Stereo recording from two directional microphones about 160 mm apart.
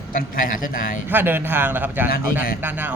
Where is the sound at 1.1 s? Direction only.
10° right (ahead or behind).